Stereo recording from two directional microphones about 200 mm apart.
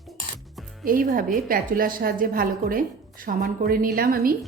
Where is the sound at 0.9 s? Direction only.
45° right (ahead or behind).